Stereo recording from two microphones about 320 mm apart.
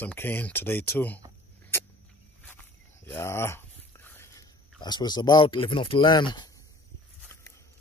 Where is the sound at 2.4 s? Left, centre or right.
Centre.